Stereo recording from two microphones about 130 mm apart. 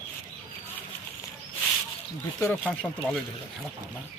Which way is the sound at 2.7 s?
10° left (ahead or behind).